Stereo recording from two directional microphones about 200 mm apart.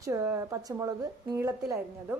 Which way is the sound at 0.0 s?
15° right (ahead or behind).